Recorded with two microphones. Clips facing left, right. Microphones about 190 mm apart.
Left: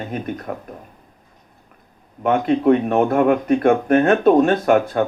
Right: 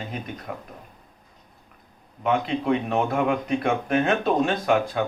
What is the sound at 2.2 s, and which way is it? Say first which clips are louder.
Speech: left 7 dB; 50° left (ahead or behind).